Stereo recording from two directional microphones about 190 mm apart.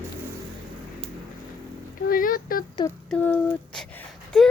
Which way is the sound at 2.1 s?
50° left (ahead or behind).